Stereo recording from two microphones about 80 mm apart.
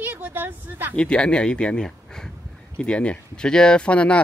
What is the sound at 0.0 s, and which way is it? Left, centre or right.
Speech, right.